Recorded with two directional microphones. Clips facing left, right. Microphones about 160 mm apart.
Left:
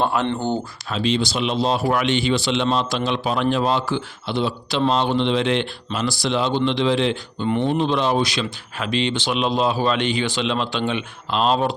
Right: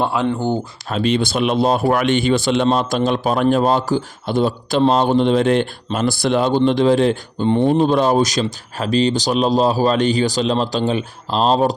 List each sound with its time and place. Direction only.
0.0 s speech: 10° right (ahead or behind)
0.9 s speech: 50° right (ahead or behind)